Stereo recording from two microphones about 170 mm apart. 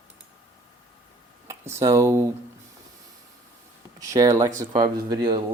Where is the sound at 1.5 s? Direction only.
15° right (ahead or behind).